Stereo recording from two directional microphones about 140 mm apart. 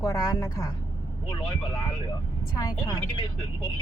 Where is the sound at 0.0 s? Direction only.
25° left (ahead or behind).